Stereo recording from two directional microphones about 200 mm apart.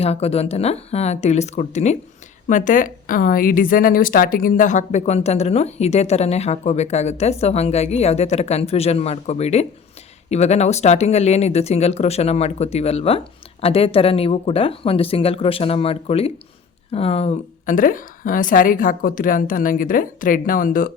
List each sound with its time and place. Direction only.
0.0 s a woman's voice: 30° left (ahead or behind)